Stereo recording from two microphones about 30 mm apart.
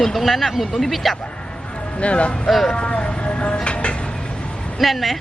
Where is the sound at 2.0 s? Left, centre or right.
Left.